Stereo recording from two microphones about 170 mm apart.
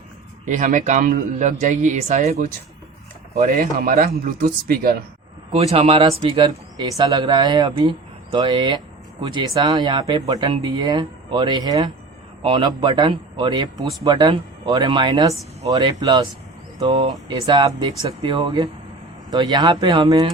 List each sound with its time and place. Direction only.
0.4 s speech: 50° right (ahead or behind)
3.3 s speech: 50° right (ahead or behind)
5.5 s speech: 35° right (ahead or behind)